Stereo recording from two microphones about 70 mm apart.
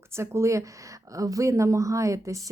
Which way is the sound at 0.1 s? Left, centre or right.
Right.